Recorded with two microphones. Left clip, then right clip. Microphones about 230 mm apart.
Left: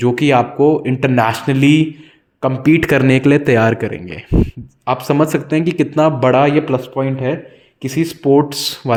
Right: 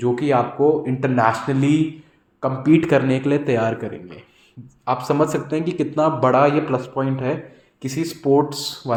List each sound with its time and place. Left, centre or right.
0.0 s a man's voice: left